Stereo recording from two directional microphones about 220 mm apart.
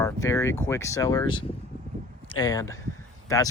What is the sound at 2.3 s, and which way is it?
Speech, 15° left (ahead or behind).